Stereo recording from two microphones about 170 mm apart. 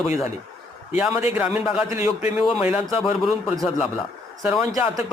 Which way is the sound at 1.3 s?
5° right (ahead or behind).